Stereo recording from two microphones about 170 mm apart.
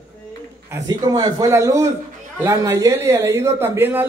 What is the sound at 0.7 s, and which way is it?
A man's voice, 20° right (ahead or behind).